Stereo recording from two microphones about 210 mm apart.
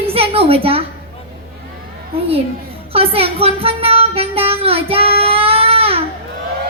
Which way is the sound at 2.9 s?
25° right (ahead or behind).